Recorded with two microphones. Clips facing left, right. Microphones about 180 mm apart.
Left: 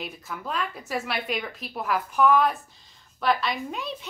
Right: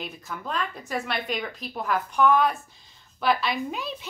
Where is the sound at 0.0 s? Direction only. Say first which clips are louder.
Even; 5° left (ahead or behind).